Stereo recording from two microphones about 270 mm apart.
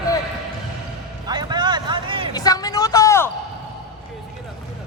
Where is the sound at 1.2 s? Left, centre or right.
Centre.